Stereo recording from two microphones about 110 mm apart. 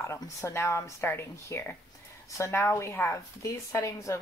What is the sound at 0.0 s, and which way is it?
Speech, 25° left (ahead or behind).